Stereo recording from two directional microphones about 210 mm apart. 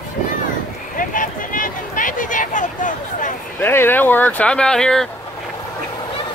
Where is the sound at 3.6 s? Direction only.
10° left (ahead or behind).